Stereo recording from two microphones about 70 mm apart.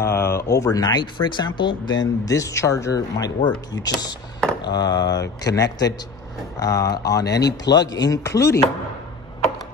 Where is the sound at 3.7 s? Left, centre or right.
Left.